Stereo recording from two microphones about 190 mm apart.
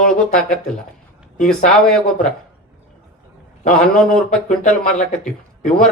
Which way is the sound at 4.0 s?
5° left (ahead or behind).